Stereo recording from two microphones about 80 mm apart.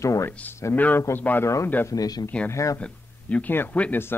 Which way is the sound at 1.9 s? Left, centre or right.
Left.